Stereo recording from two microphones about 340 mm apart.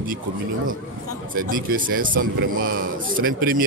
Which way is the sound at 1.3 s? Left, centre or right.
Right.